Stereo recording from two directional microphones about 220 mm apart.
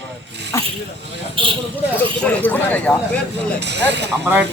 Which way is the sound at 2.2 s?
5° left (ahead or behind).